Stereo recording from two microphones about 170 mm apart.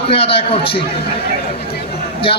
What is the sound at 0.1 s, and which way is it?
Speech, 35° left (ahead or behind).